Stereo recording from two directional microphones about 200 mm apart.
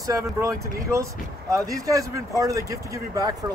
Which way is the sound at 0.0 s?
15° right (ahead or behind).